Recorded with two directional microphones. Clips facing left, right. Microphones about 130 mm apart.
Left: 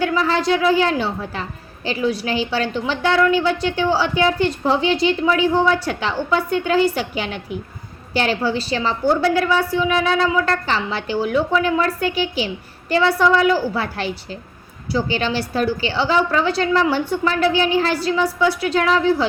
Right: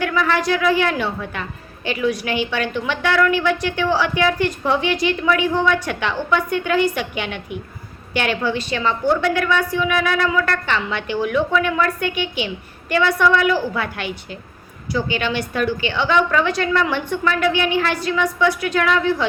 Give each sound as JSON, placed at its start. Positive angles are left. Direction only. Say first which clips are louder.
{"t": 0.0, "sound": "a woman's voice", "louder": "left 1 dB", "side_deg": 30}